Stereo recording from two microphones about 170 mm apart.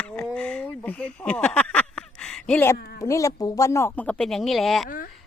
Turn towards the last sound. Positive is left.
turn(degrees=55)  # may be behind; listen again after turning